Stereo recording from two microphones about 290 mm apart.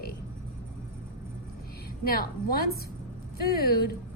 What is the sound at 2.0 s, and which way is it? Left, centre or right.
A woman's voice, left.